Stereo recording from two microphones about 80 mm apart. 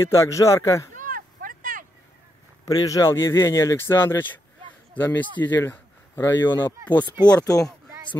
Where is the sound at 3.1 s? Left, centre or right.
Left.